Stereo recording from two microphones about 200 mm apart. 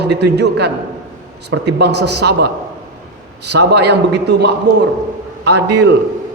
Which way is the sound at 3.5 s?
55° right (ahead or behind).